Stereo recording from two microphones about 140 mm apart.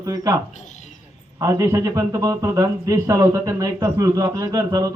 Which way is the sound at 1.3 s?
20° right (ahead or behind).